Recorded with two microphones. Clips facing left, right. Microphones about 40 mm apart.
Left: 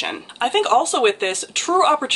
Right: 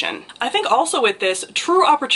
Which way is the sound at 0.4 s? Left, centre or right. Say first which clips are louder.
Left 1 dB; centre.